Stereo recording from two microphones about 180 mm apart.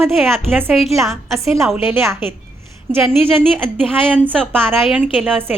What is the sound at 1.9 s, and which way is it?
Speech, 15° right (ahead or behind).